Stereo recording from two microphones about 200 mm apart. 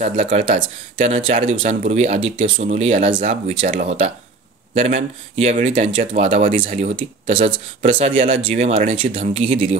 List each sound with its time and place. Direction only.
0.0 s speech: 30° right (ahead or behind)